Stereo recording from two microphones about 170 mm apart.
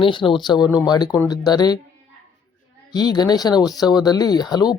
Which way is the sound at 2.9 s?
25° left (ahead or behind).